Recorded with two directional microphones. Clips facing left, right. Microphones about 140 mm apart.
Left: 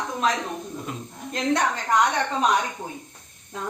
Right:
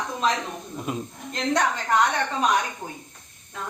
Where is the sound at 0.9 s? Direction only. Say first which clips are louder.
Right 9 dB; 15° right (ahead or behind).